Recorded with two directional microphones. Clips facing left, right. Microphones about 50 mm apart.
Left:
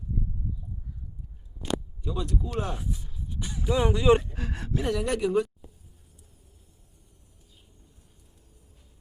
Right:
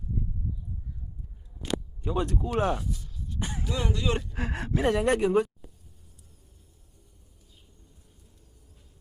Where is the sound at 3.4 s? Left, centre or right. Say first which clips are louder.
Right 3 dB; right.